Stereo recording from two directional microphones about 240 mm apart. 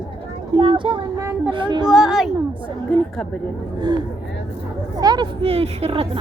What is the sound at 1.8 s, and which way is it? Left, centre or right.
A woman's voice, centre.